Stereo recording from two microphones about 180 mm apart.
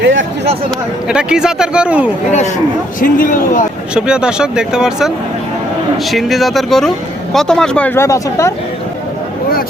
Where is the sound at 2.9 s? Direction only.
50° left (ahead or behind).